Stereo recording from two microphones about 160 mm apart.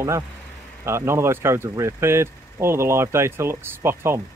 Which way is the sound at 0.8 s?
15° right (ahead or behind).